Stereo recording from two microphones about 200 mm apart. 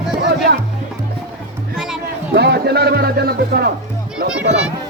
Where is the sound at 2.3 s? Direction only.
55° right (ahead or behind).